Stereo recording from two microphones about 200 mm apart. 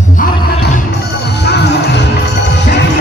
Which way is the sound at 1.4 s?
55° left (ahead or behind).